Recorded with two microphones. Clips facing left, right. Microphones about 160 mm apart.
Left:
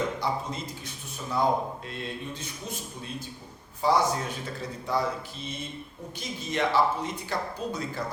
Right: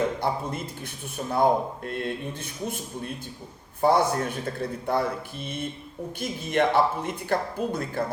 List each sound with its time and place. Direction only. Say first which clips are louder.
0.2 s speech: right 3 dB; 55° right (ahead or behind)